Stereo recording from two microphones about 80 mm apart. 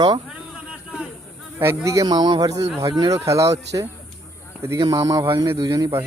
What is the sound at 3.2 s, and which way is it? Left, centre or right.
Speech, right.